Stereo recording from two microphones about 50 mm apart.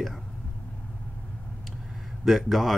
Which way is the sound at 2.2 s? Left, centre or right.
Centre.